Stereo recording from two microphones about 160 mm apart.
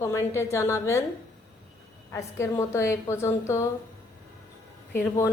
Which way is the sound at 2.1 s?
15° left (ahead or behind).